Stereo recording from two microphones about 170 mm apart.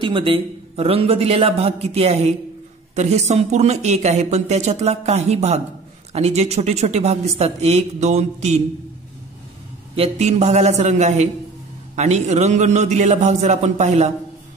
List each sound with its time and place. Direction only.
0.0 s a woman's voice: 30° right (ahead or behind)
9.9 s a woman's voice: 40° right (ahead or behind)